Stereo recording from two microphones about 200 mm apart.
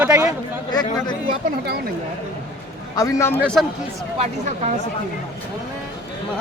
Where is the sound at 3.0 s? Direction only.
15° left (ahead or behind).